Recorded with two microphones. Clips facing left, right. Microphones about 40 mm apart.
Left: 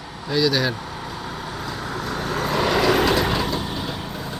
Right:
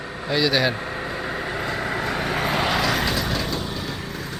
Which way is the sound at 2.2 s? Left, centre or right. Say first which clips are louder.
Left 2 dB; right.